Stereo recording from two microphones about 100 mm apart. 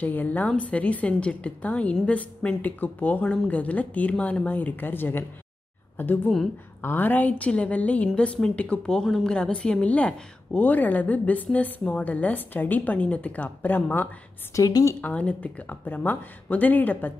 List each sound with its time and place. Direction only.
0.0 s a woman's voice: 15° left (ahead or behind)
14.5 s a woman's voice: 35° left (ahead or behind)
15.0 s a woman's voice: 15° left (ahead or behind)